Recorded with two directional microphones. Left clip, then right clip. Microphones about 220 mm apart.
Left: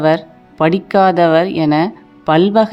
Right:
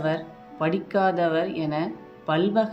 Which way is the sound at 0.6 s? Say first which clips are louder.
Left 11 dB; 50° left (ahead or behind).